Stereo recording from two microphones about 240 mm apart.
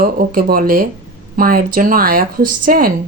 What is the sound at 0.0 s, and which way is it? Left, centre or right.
Speech, right.